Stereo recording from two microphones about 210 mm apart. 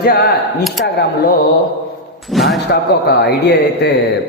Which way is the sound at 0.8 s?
55° left (ahead or behind).